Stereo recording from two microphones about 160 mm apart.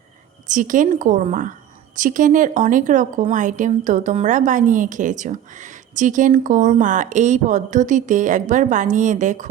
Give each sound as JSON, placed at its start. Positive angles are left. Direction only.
{"t": 0.4, "sound": "a woman's voice", "side_deg": -55}